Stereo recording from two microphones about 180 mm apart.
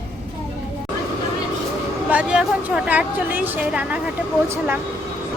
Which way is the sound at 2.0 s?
5° right (ahead or behind).